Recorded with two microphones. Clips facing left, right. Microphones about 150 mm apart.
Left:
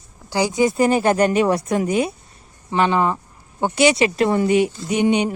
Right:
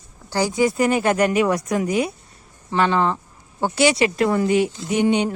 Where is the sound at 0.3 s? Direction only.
15° left (ahead or behind).